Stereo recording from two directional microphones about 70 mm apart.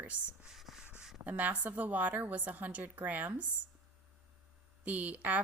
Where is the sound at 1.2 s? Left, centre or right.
Right.